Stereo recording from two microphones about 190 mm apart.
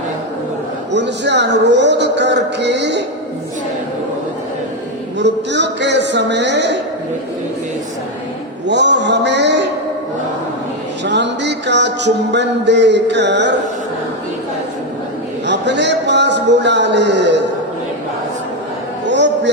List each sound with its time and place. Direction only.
0.9 s a man's voice: 65° right (ahead or behind)
5.2 s a man's voice: 65° right (ahead or behind)
8.6 s a sound: 65° right (ahead or behind)
11.0 s music: 65° right (ahead or behind)
15.4 s speech: 65° right (ahead or behind)
19.0 s a sound: 65° right (ahead or behind)